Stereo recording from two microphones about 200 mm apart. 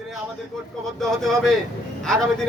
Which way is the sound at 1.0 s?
Centre (ahead or behind).